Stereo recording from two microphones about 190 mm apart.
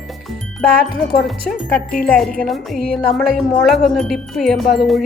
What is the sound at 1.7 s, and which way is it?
Speech, 50° left (ahead or behind).